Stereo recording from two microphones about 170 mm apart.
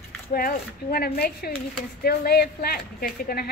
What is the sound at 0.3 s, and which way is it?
Speech, 55° left (ahead or behind).